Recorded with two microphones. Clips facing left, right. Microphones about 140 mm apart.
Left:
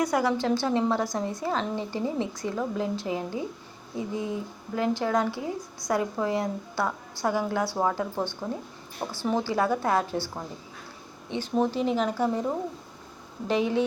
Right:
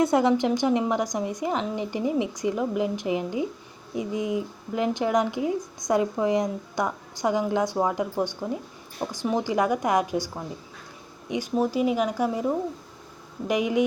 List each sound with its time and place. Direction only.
0.0 s a woman's voice: 25° right (ahead or behind)